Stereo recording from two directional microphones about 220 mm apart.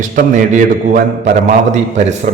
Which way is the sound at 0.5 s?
35° right (ahead or behind).